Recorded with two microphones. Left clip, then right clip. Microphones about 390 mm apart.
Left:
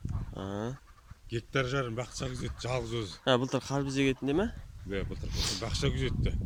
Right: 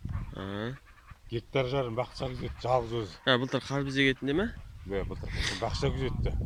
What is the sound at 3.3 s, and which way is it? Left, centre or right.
Speech, centre.